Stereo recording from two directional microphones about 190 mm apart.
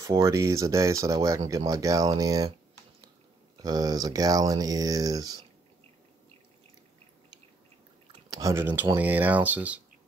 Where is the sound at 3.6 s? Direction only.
20° right (ahead or behind).